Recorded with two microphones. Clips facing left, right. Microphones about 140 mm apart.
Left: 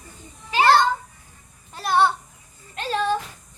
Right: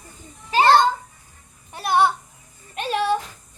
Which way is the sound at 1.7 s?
15° right (ahead or behind).